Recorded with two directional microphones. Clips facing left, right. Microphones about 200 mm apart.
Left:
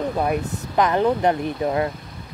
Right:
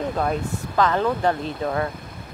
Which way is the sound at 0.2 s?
15° left (ahead or behind).